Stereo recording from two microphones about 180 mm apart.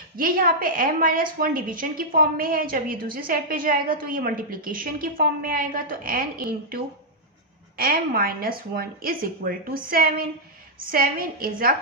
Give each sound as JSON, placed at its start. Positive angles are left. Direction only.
{"t": 0.2, "sound": "a woman's voice", "side_deg": -50}